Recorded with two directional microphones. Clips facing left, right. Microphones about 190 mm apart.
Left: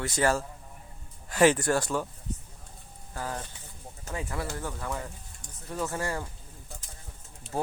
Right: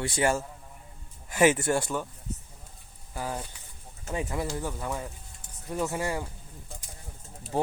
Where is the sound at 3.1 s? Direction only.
10° right (ahead or behind).